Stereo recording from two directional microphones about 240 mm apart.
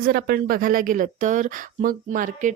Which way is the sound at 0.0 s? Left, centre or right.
Right.